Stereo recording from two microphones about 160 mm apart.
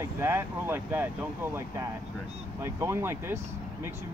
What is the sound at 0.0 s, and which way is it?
Speech, 15° right (ahead or behind).